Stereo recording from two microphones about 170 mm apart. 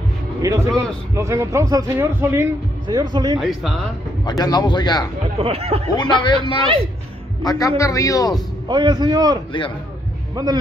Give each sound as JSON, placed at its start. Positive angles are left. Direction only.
{"t": 0.4, "sound": "a man's voice", "side_deg": -20}
{"t": 2.9, "sound": "a man's voice", "side_deg": -25}
{"t": 3.3, "sound": "a man's voice", "side_deg": 0}
{"t": 4.2, "sound": "a man's voice", "side_deg": 25}
{"t": 5.4, "sound": "speech", "side_deg": -35}
{"t": 5.9, "sound": "a man's voice", "side_deg": 25}
{"t": 7.4, "sound": "a man's voice", "side_deg": 20}
{"t": 8.6, "sound": "a man's voice", "side_deg": -25}